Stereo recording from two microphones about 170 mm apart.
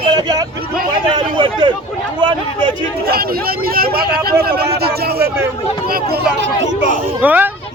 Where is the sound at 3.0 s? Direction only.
65° right (ahead or behind).